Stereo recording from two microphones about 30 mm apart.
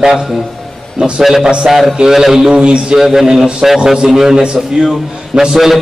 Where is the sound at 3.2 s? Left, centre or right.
Right.